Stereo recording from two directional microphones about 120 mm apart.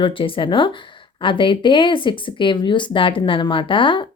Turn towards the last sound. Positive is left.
turn(degrees=45)  # may be behind; listen again after turning